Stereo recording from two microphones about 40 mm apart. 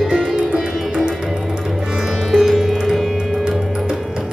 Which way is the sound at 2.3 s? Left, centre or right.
Centre.